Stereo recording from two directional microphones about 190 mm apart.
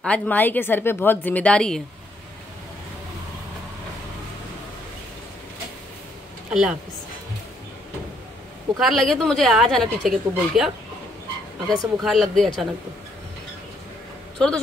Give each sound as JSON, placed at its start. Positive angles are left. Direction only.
{"t": 0.0, "sound": "a woman's voice", "side_deg": 5}
{"t": 6.5, "sound": "speech", "side_deg": -5}
{"t": 8.7, "sound": "speech", "side_deg": 0}
{"t": 11.6, "sound": "speech", "side_deg": -20}
{"t": 12.0, "sound": "speech", "side_deg": 0}